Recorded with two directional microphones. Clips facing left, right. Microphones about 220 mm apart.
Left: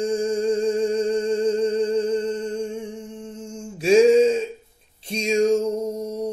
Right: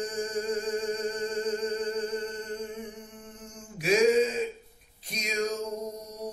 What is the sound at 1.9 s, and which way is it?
Music, 25° left (ahead or behind).